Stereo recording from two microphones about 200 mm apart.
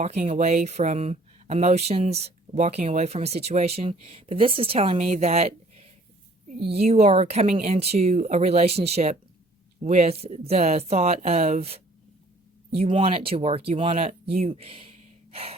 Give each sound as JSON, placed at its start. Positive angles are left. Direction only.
{"t": 0.0, "sound": "speech", "side_deg": -30}
{"t": 15.3, "sound": "gasp", "side_deg": -30}